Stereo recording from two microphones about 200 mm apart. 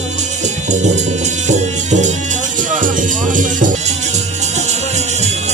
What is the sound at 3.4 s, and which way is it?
Music, 40° right (ahead or behind).